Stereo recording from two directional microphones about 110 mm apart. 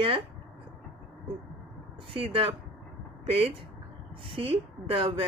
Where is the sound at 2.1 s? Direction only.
55° right (ahead or behind).